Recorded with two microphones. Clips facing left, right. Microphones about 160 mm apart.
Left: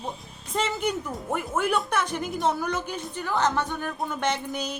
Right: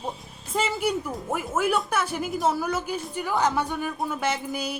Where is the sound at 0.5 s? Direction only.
5° right (ahead or behind).